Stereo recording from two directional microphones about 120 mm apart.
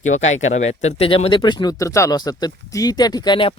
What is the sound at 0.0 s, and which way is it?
Speech, 75° left (ahead or behind).